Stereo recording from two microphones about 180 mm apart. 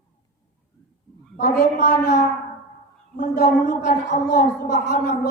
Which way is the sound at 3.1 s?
45° left (ahead or behind).